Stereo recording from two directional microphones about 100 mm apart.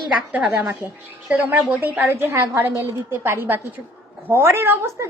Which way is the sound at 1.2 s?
15° right (ahead or behind).